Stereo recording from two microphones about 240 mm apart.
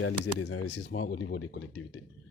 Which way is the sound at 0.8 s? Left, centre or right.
Left.